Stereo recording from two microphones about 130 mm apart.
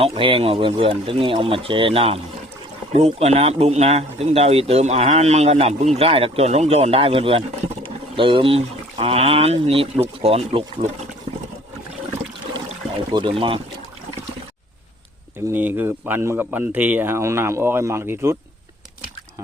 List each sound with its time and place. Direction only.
0.0 s speech: 45° right (ahead or behind)
13.1 s speech: 40° right (ahead or behind)
15.4 s speech: 15° right (ahead or behind)